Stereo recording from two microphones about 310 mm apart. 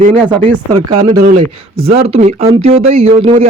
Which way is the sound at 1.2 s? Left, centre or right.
Right.